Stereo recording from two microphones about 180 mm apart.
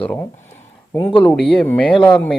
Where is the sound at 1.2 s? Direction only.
5° left (ahead or behind).